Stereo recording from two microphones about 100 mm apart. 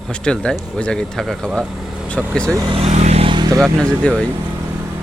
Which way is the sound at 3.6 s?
10° left (ahead or behind).